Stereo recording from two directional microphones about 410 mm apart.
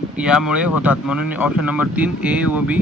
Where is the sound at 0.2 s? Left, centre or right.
Centre.